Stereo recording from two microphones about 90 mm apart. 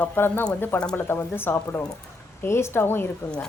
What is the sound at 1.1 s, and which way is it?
A woman's voice, 25° left (ahead or behind).